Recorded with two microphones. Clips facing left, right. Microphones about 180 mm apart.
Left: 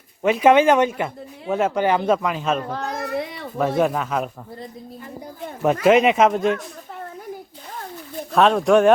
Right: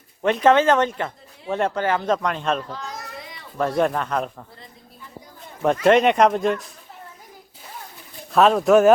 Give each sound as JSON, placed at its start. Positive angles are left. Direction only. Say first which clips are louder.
{"t": 0.2, "sound": "speech", "louder": "left 2 dB", "side_deg": 5}
{"t": 1.8, "sound": "speech", "louder": "left 3 dB", "side_deg": 15}
{"t": 2.6, "sound": "a sound", "louder": "left 6 dB", "side_deg": 55}
{"t": 3.6, "sound": "speech", "louder": "left 1 dB", "side_deg": 5}
{"t": 5.8, "sound": "speech", "louder": "left 1 dB", "side_deg": 5}
{"t": 8.3, "sound": "speech", "louder": "even", "side_deg": 0}